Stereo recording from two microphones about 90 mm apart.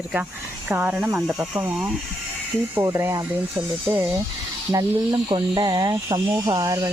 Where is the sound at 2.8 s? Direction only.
25° right (ahead or behind).